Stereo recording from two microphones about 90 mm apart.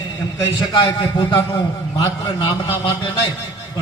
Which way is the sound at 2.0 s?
65° left (ahead or behind).